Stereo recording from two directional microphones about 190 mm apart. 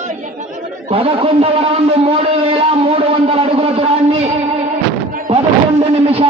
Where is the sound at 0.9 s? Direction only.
30° right (ahead or behind).